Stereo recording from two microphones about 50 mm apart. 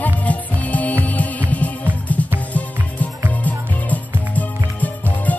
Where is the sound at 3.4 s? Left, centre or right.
Left.